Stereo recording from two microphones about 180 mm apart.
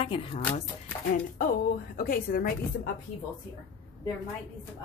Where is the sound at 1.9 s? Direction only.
55° left (ahead or behind).